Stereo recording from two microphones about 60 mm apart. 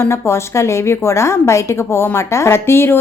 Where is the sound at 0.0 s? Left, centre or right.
Left.